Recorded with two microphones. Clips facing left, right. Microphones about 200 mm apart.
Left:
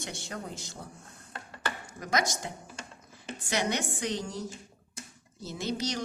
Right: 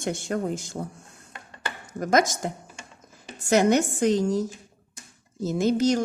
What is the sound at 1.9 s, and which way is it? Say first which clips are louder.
A woman's voice: right 10 dB; 45° right (ahead or behind).